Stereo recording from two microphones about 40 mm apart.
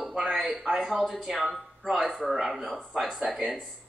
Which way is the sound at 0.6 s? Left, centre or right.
Centre.